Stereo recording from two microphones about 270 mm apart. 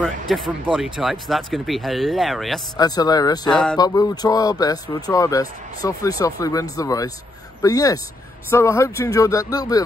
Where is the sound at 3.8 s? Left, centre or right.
Centre.